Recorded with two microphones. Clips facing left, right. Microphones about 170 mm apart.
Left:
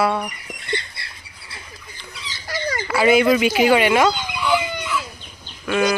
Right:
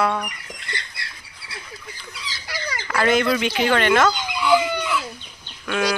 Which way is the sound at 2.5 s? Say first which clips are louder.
Left 5 dB; 45° left (ahead or behind).